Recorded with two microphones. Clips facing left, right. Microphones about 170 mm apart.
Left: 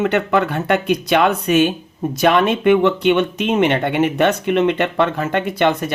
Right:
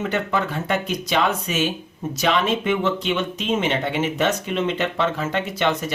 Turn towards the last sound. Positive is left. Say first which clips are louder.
# left 5 dB
turn(degrees=55)  # may be behind; listen again after turning